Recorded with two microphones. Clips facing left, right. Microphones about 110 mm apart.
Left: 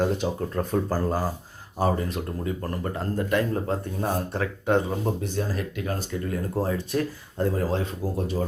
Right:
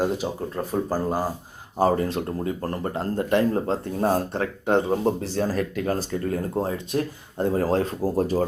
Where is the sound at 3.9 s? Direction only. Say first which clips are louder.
Right 5 dB; 40° right (ahead or behind).